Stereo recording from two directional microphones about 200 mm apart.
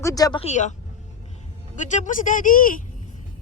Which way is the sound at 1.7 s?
35° left (ahead or behind).